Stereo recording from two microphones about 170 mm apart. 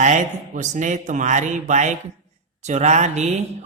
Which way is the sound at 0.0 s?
45° right (ahead or behind).